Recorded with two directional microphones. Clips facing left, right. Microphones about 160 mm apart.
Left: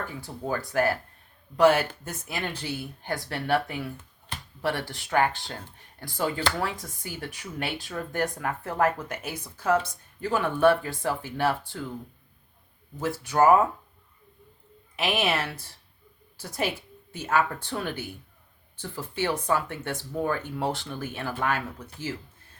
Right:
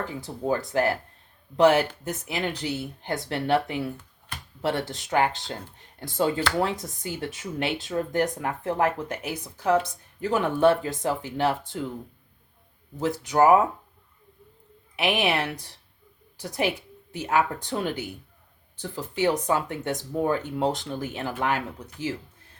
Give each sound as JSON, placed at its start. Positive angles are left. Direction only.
{"t": 0.0, "sound": "speech", "side_deg": -20}
{"t": 13.2, "sound": "speech", "side_deg": -15}
{"t": 14.9, "sound": "speech", "side_deg": -15}